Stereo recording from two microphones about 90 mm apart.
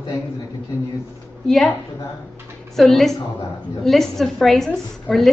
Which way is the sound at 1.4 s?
5° left (ahead or behind).